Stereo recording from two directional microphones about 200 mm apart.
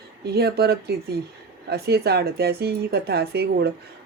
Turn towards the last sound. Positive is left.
turn(degrees=-55)  # may be behind; listen again after turning